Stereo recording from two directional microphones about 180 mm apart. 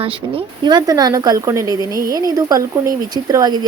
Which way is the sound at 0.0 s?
25° right (ahead or behind).